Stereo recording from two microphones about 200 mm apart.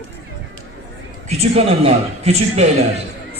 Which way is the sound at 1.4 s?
30° right (ahead or behind).